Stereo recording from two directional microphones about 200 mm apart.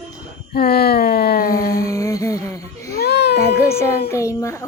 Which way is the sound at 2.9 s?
55° left (ahead or behind).